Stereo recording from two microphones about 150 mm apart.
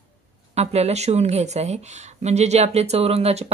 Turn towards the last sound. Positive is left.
turn(degrees=-45)  # may be behind; listen again after turning